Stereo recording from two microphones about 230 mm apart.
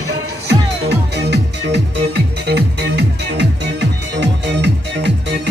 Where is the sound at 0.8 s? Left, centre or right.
Right.